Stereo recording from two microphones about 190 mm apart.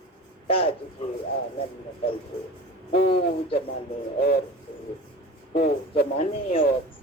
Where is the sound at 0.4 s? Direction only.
30° left (ahead or behind).